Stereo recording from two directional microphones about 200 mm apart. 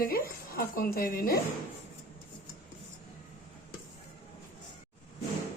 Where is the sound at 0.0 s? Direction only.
45° left (ahead or behind).